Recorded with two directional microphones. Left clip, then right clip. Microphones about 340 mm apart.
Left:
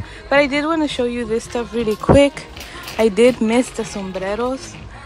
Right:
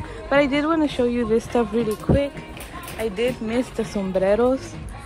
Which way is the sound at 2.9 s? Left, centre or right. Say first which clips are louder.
Left 10 dB; centre.